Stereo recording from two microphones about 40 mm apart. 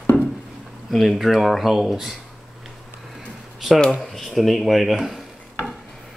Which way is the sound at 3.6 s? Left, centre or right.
Centre.